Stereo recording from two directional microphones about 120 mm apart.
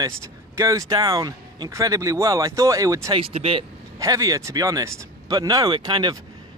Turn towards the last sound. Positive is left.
turn(degrees=-35)  # may be behind; listen again after turning